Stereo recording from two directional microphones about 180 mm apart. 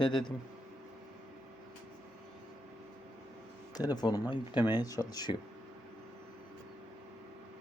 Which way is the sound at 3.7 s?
20° left (ahead or behind).